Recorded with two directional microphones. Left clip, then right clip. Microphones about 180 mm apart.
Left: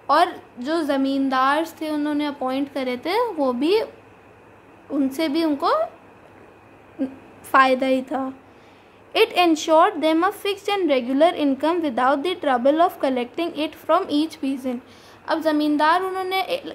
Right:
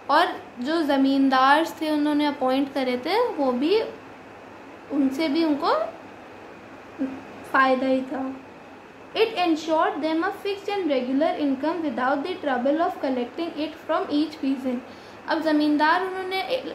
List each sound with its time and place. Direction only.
0.0 s a woman's voice: 30° left (ahead or behind)
5.1 s a woman's voice: 30° left (ahead or behind)
7.5 s a woman's voice: 30° left (ahead or behind)